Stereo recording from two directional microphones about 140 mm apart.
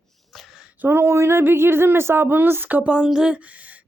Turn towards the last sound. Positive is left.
turn(degrees=-10)  # may be behind; listen again after turning